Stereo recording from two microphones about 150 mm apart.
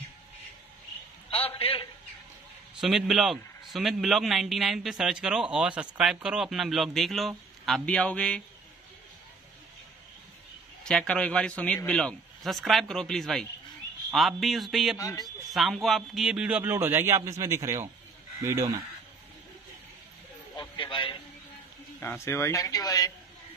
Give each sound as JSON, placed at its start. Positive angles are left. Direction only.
{"t": 1.6, "sound": "a man's voice", "side_deg": 40}
{"t": 2.7, "sound": "a man's voice", "side_deg": 0}
{"t": 10.8, "sound": "a man's voice", "side_deg": 5}
{"t": 15.0, "sound": "speech", "side_deg": 20}
{"t": 15.2, "sound": "speech", "side_deg": 0}
{"t": 20.5, "sound": "a sound", "side_deg": 35}
{"t": 22.0, "sound": "speech", "side_deg": 20}